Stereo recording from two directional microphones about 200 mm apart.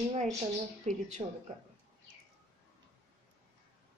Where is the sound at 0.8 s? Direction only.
35° right (ahead or behind).